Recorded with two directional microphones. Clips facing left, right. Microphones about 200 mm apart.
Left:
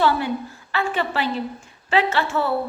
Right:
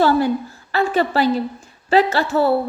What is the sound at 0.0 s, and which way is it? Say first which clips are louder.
A woman's voice: right 5 dB; 40° right (ahead or behind).